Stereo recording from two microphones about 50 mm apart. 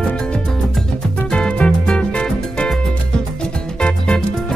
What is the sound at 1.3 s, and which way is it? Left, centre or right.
Music, centre.